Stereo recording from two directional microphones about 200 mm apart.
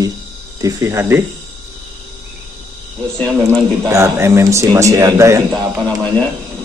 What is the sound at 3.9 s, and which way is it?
Speech, 15° right (ahead or behind).